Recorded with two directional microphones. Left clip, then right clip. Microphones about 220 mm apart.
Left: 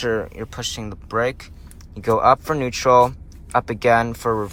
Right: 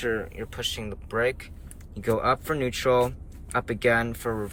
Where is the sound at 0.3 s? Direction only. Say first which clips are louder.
Left 3 dB; 15° left (ahead or behind).